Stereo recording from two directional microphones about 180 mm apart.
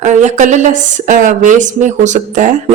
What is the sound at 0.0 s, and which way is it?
A woman's voice, 40° right (ahead or behind).